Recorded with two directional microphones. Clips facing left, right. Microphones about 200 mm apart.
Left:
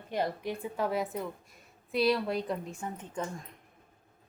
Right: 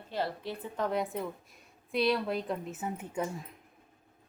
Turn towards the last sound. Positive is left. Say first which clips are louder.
# right 2 dB
turn(degrees=-5)  # may be behind; listen again after turning